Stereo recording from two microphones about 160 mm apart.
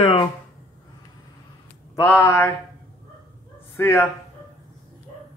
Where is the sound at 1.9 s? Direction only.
15° left (ahead or behind).